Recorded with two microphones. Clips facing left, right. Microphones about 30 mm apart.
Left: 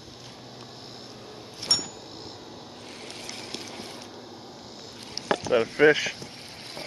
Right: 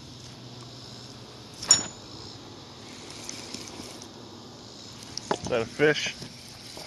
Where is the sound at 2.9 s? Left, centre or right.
Left.